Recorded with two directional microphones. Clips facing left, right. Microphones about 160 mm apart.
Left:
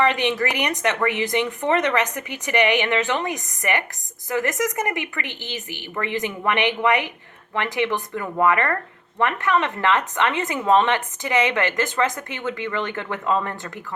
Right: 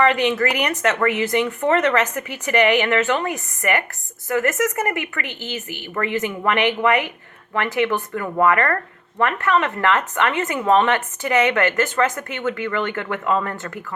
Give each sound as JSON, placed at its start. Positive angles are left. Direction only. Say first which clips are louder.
{"t": 0.0, "sound": "a woman's voice", "louder": "right 3 dB", "side_deg": 20}